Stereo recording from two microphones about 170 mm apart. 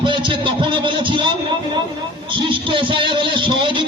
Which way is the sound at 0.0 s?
30° right (ahead or behind).